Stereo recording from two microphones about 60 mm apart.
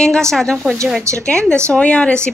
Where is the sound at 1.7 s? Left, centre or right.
Left.